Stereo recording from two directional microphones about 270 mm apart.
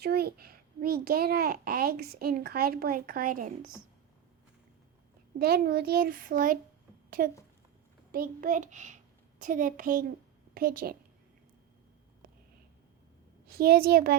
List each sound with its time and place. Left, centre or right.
0.0 s a child's voice: right
5.4 s a child's voice: right
13.5 s a child's voice: right